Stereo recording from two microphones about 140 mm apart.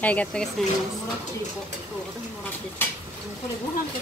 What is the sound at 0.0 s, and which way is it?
Speech, 10° left (ahead or behind).